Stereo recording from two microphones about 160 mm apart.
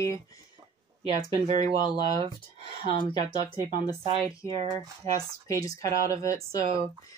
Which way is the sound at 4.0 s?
30° right (ahead or behind).